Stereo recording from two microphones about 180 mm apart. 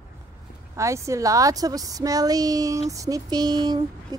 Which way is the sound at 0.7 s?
15° right (ahead or behind).